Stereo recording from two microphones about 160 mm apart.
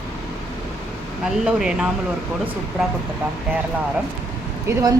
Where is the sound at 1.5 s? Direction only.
5° right (ahead or behind).